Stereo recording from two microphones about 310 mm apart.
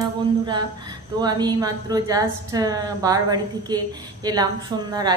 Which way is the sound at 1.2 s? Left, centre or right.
Centre.